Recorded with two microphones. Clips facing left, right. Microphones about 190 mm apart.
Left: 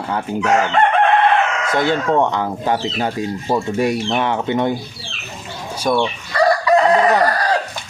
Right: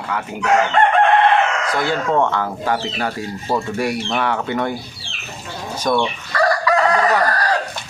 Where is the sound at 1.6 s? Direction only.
20° left (ahead or behind).